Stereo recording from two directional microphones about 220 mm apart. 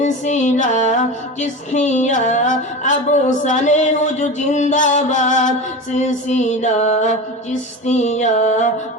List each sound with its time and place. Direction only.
0.0 s female singing: 30° left (ahead or behind)